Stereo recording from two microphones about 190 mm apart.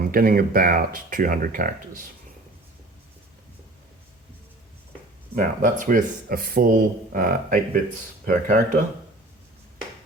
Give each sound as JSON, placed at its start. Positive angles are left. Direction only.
{"t": 0.1, "sound": "speech", "side_deg": -50}
{"t": 5.3, "sound": "speech", "side_deg": -45}